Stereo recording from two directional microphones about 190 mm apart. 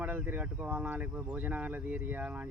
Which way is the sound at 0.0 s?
10° right (ahead or behind).